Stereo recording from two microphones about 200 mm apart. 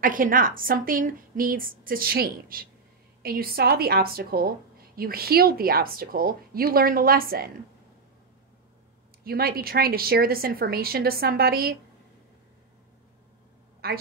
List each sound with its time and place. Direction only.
0.0 s a woman's voice: 45° right (ahead or behind)
9.2 s a woman's voice: 50° right (ahead or behind)
13.8 s a woman's voice: 50° right (ahead or behind)